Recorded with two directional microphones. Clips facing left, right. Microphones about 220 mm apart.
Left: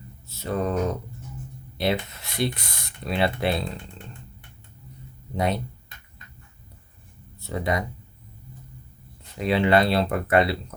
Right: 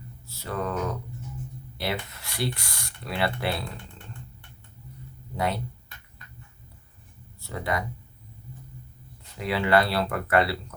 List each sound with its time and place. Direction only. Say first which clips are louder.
0.3 s mantra: left 5 dB; 20° left (ahead or behind)
1.8 s speech: left 6 dB; 20° left (ahead or behind)
5.3 s speech: left 3 dB; 20° left (ahead or behind)
7.4 s speech: left 4 dB; 20° left (ahead or behind)
9.4 s speech: left 3 dB; 20° left (ahead or behind)